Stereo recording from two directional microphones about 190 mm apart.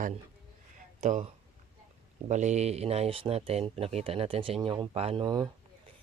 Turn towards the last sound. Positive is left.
turn(degrees=-20)  # may be behind; listen again after turning